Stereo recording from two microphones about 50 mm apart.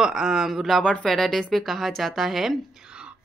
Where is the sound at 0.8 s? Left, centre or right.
Centre.